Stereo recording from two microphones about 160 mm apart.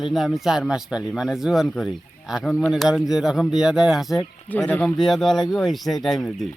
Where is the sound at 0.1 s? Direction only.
Centre (ahead or behind).